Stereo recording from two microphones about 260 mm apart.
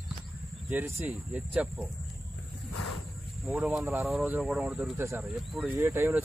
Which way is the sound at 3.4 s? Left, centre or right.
Centre.